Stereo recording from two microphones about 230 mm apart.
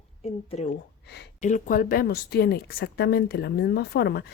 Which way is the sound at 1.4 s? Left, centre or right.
Left.